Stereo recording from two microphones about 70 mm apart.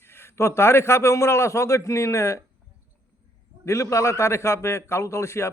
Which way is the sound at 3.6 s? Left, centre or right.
Left.